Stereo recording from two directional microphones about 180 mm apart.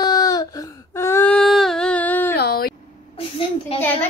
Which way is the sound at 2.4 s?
60° left (ahead or behind).